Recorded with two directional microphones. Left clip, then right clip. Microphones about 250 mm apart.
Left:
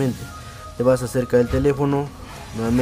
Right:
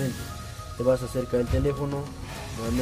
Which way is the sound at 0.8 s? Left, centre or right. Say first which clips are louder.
Left 6 dB; centre.